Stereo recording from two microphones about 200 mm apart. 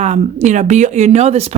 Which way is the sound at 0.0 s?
35° right (ahead or behind).